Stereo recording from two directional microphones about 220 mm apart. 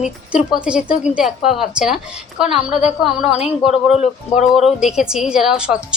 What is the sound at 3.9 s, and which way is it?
Speech, 30° left (ahead or behind).